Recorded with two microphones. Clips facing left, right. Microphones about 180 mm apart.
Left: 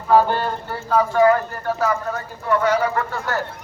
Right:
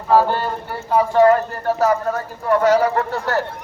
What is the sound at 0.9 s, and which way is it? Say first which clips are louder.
Speech: right 2 dB; 30° right (ahead or behind).